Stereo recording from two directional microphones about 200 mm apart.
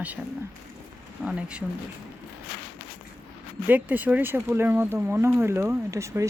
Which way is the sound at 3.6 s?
10° right (ahead or behind).